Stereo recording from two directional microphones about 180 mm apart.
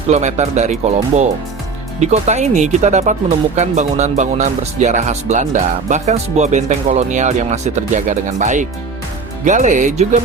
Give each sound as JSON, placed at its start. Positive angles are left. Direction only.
{"t": 0.1, "sound": "speech", "side_deg": -40}